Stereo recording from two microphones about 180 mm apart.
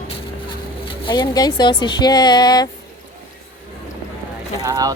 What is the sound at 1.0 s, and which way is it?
Speech, 25° left (ahead or behind).